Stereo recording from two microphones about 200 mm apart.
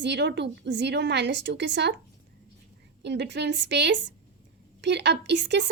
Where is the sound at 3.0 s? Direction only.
60° right (ahead or behind).